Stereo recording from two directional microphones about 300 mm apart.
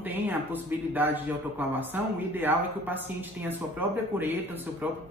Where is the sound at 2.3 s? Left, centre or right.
Centre.